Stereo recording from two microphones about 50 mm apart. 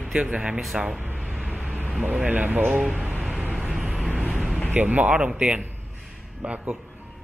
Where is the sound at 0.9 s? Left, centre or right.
Right.